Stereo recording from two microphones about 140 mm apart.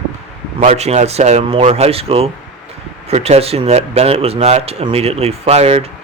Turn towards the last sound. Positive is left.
turn(degrees=-50)  # may be behind; listen again after turning